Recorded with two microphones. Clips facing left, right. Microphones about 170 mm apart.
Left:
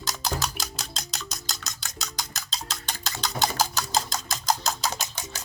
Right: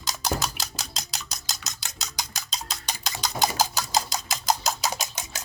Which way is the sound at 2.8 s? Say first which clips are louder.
Right 1 dB; 15° right (ahead or behind).